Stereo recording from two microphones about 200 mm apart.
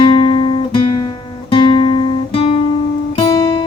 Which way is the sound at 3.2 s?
20° left (ahead or behind).